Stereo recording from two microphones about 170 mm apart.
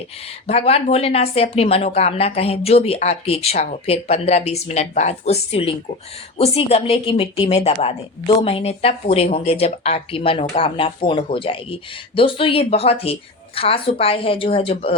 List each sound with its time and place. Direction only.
0.4 s speech: 35° left (ahead or behind)